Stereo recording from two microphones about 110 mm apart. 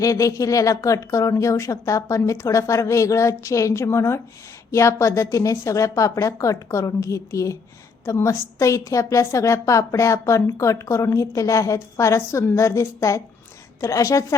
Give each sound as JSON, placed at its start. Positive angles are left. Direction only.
{"t": 0.0, "sound": "a woman's voice", "side_deg": 30}